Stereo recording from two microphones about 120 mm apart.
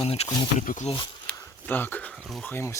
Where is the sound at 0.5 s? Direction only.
90° left.